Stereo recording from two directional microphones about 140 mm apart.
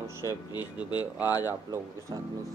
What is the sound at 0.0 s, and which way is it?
Speech, 20° right (ahead or behind).